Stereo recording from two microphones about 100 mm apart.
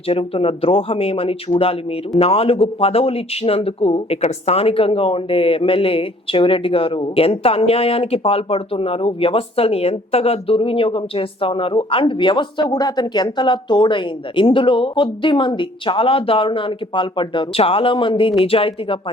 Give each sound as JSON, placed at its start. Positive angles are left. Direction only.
{"t": 0.1, "sound": "a man's voice", "side_deg": 70}